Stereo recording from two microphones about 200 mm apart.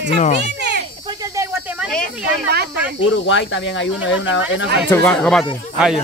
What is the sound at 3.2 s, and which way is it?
Speech, 65° left (ahead or behind).